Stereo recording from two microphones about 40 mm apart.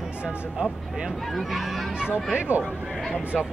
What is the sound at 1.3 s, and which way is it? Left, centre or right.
Speech, centre.